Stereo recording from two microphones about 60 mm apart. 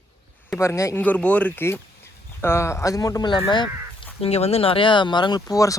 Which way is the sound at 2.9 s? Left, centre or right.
Left.